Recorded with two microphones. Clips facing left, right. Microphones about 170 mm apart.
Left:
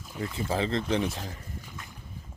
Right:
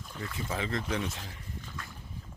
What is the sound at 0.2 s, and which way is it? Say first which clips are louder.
Speech: left 6 dB; 30° left (ahead or behind).